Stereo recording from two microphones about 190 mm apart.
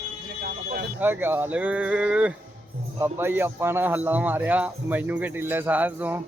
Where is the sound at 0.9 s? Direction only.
10° right (ahead or behind).